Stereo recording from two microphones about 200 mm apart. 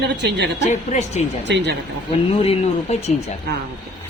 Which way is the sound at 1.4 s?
60° right (ahead or behind).